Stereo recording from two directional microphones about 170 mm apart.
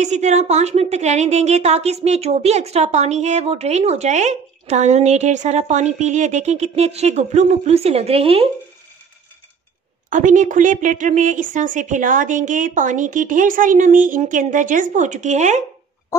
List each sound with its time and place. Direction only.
0.0 s a woman's voice: 40° right (ahead or behind)
10.0 s a woman's voice: 50° right (ahead or behind)